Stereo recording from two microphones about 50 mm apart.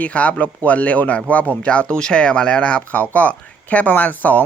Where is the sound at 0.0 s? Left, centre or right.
Left.